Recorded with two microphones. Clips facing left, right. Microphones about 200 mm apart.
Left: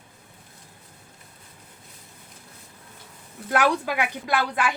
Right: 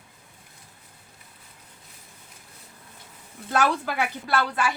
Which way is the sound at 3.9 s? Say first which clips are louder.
Left 1 dB; 15° left (ahead or behind).